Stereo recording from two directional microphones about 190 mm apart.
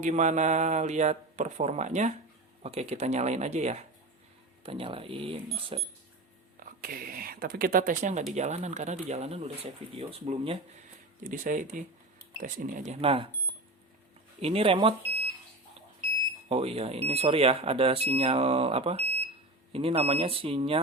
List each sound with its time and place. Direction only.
0.0 s speech: 40° right (ahead or behind)
6.6 s speech: 50° right (ahead or behind); by 10.6 s 30° right (ahead or behind)
11.2 s speech: 45° right (ahead or behind); by 13.2 s 30° right (ahead or behind)
14.4 s speech: 30° right (ahead or behind)
16.5 s speech: 30° right (ahead or behind)